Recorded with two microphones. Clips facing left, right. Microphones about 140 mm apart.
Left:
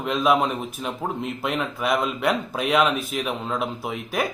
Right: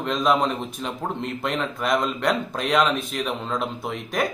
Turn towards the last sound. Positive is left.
turn(degrees=5)  # may be behind; listen again after turning